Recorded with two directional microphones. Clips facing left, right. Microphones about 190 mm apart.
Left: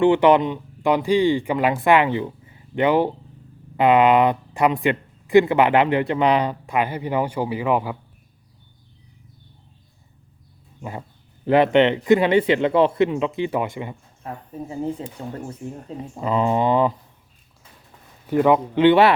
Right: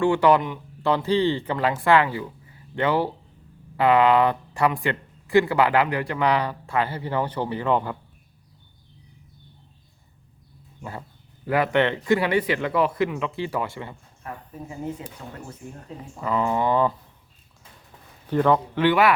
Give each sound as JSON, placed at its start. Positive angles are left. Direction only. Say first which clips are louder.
{"t": 0.0, "sound": "speech", "louder": "left 4 dB", "side_deg": 20}
{"t": 10.8, "sound": "dog", "louder": "left 3 dB", "side_deg": 20}
{"t": 11.4, "sound": "speech", "louder": "left 6 dB", "side_deg": 25}
{"t": 14.5, "sound": "speech", "louder": "left 6 dB", "side_deg": 30}
{"t": 16.1, "sound": "speech", "louder": "left 3 dB", "side_deg": 20}
{"t": 18.3, "sound": "speech", "louder": "left 3 dB", "side_deg": 10}